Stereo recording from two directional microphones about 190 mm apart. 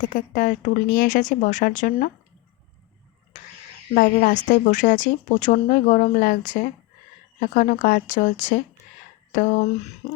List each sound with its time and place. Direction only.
0.0 s speech: 45° left (ahead or behind)
3.9 s speech: 45° left (ahead or behind)